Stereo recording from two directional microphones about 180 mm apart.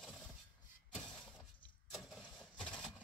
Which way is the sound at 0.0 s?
5° left (ahead or behind).